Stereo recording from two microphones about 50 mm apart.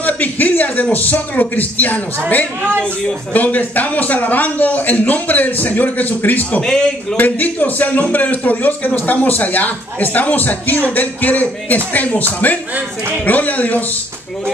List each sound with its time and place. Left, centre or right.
0.0 s a sound: left
0.9 s a man's voice: left
6.6 s a man's voice: centre
7.2 s a man's voice: left